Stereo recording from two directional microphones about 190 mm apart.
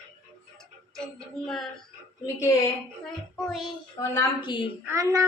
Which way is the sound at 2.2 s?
15° left (ahead or behind).